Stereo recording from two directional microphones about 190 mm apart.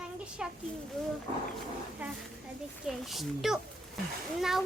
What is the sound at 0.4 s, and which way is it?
Speech, 5° right (ahead or behind).